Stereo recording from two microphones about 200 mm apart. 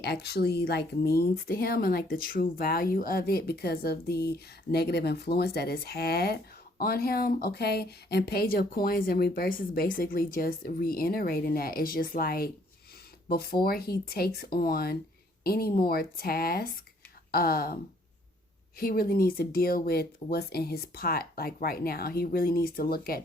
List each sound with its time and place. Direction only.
0.0 s speech: 55° left (ahead or behind)
18.8 s speech: 50° left (ahead or behind)